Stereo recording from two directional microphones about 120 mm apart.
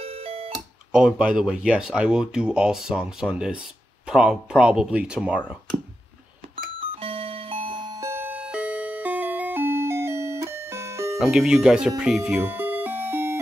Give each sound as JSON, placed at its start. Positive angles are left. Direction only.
{"t": 0.0, "sound": "music", "side_deg": -55}
{"t": 0.9, "sound": "speech", "side_deg": -5}
{"t": 6.5, "sound": "alarm clock", "side_deg": -50}
{"t": 8.1, "sound": "music", "side_deg": -15}
{"t": 11.1, "sound": "speech", "side_deg": -5}
{"t": 12.4, "sound": "music", "side_deg": -15}